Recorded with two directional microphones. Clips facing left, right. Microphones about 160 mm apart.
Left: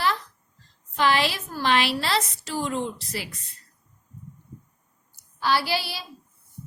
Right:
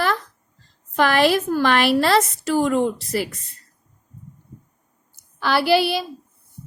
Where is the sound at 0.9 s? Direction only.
50° right (ahead or behind).